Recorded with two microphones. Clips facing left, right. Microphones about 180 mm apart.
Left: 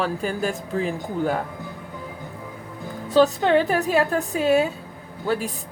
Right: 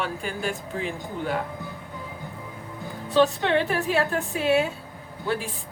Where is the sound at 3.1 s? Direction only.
40° left (ahead or behind).